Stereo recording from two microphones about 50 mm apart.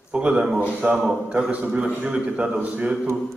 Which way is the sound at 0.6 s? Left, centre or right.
Right.